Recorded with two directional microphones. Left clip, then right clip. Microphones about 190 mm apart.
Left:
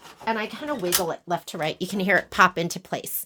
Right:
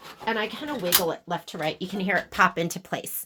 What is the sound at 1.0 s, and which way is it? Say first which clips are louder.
Speech: left 1 dB; 50° left (ahead or behind).